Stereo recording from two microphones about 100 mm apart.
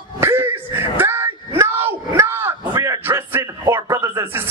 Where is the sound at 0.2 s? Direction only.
25° right (ahead or behind).